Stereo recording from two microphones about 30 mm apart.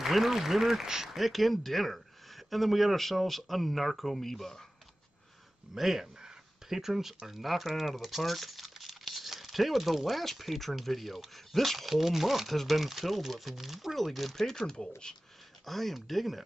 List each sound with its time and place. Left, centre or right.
0.0 s speech: centre
1.1 s speech: centre
5.8 s speech: centre
8.2 s crumpling: centre
10.2 s speech: centre
11.9 s speech: centre
13.9 s speech: centre
14.5 s speech: left
15.6 s speech: centre